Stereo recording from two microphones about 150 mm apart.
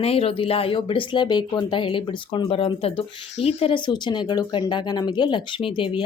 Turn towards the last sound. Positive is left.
turn(degrees=35)  # may be behind; listen again after turning